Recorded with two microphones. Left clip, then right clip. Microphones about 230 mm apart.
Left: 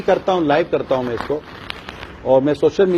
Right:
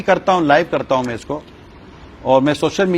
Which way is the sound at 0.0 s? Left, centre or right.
Right.